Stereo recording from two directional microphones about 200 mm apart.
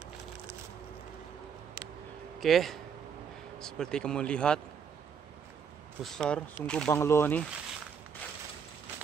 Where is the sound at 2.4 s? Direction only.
Centre (ahead or behind).